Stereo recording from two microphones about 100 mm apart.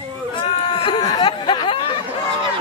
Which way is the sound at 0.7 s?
45° left (ahead or behind).